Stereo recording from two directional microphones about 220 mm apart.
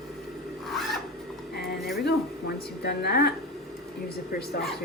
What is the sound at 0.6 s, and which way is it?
Filing, centre (ahead or behind).